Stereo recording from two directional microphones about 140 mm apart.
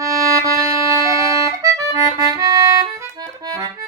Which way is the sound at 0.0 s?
20° right (ahead or behind).